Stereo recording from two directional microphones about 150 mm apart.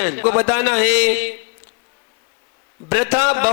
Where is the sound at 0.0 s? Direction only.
20° right (ahead or behind).